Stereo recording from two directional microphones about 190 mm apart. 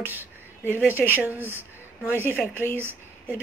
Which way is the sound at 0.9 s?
10° right (ahead or behind).